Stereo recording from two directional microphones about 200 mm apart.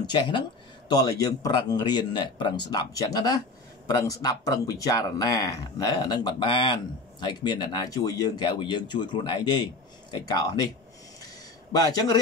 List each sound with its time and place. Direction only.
0.0 s speech: 20° left (ahead or behind)
11.7 s speech: 20° left (ahead or behind)